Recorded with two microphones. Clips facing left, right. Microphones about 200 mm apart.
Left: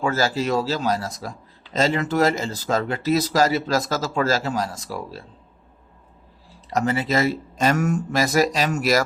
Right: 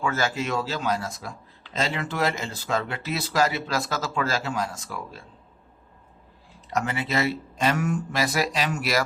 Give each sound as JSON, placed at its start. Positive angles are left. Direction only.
{"t": 0.0, "sound": "speech", "side_deg": 35}
{"t": 6.7, "sound": "speech", "side_deg": 35}